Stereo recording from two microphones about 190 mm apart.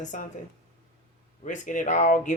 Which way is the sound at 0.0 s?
40° left (ahead or behind).